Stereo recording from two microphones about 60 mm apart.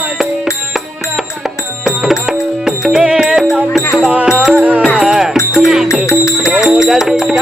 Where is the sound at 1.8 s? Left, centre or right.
Centre.